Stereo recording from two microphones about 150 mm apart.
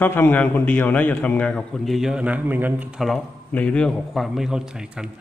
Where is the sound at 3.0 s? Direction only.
Centre (ahead or behind).